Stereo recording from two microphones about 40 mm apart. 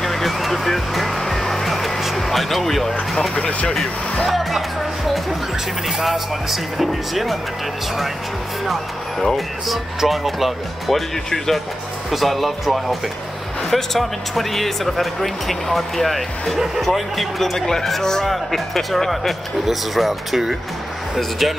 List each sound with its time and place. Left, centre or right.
0.0 s music: centre
3.3 s speech: left
4.3 s speech: centre
9.2 s speech: centre